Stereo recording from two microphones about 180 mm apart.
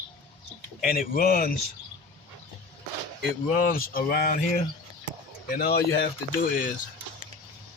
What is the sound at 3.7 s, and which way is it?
Speech, 55° left (ahead or behind).